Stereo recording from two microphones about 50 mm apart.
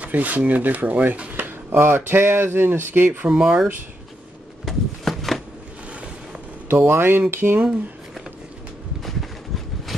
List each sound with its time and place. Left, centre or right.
0.0 s speech: right
1.3 s speech: right
3.0 s speech: right
3.3 s speech: centre
4.6 s a sound: centre
6.7 s speech: right